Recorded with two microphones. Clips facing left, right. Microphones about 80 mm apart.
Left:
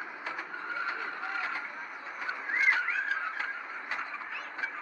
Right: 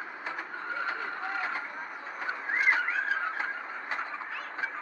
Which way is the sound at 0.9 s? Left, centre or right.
Centre.